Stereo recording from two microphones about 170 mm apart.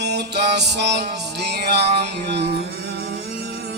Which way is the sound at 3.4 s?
75° right (ahead or behind).